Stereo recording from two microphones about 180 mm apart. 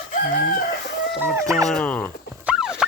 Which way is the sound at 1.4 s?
20° right (ahead or behind).